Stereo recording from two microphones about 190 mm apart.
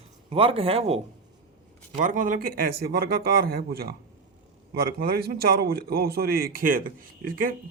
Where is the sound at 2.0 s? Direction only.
45° right (ahead or behind).